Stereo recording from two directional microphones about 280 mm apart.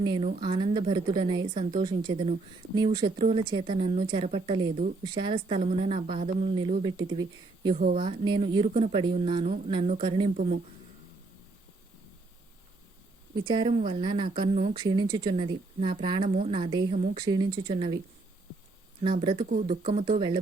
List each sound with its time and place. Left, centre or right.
0.0 s a woman's voice: centre
5.0 s a woman's voice: centre
13.3 s a woman's voice: centre
19.0 s a woman's voice: centre